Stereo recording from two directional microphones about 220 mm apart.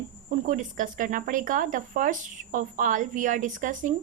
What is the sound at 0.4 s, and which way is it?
Speech, 35° right (ahead or behind).